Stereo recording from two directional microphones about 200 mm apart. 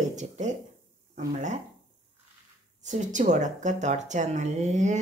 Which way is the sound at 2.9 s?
40° right (ahead or behind).